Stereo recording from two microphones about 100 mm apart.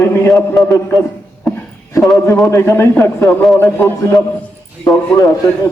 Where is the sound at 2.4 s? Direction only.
25° left (ahead or behind).